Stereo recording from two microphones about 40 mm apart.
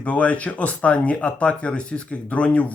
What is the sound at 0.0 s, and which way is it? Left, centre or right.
A man's voice, left.